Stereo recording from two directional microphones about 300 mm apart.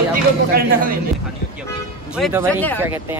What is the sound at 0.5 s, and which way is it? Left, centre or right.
Speech, right.